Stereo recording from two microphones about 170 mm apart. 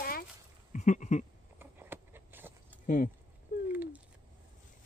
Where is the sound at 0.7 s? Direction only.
45° left (ahead or behind).